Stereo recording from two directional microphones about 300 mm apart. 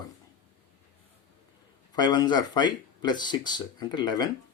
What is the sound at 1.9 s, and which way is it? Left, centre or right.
Speech, centre.